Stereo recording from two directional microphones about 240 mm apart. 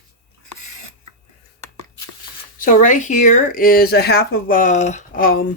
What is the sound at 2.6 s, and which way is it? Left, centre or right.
Speech, left.